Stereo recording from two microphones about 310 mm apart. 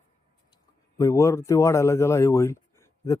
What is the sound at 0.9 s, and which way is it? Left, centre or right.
A man's voice, centre.